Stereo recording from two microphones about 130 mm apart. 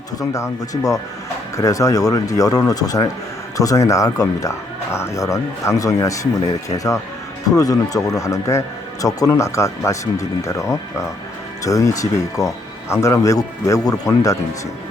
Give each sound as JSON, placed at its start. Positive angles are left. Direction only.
{"t": 0.2, "sound": "speech", "side_deg": 25}